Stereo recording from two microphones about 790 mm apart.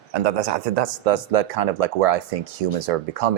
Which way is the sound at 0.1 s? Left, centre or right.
Right.